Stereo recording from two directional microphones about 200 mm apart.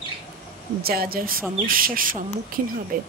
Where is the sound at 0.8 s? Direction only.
50° right (ahead or behind).